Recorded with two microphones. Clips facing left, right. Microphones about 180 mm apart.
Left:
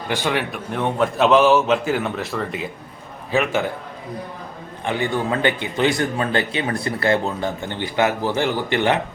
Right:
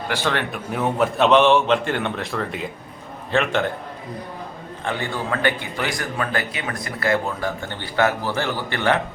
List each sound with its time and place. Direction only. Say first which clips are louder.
0.1 s a man's voice: left 2 dB; 15° left (ahead or behind)
0.5 s a man's voice: even; 5° right (ahead or behind)
4.9 s speech: left 4 dB; 15° left (ahead or behind)